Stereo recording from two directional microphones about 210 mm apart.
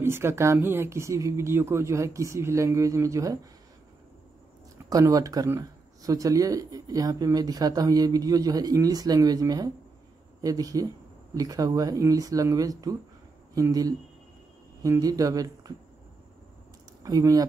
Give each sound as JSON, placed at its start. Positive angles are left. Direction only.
{"t": 0.0, "sound": "speech", "side_deg": -10}
{"t": 4.8, "sound": "speech", "side_deg": -15}
{"t": 17.0, "sound": "speech", "side_deg": -15}